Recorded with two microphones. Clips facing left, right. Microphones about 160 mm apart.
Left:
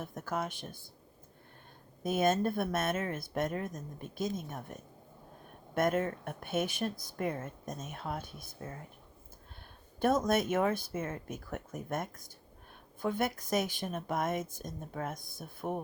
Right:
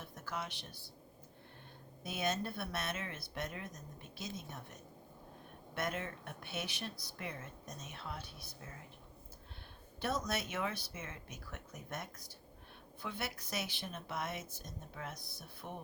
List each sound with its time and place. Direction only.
0.0 s speech: 50° left (ahead or behind)
2.0 s speech: 50° left (ahead or behind)
10.0 s speech: 50° left (ahead or behind)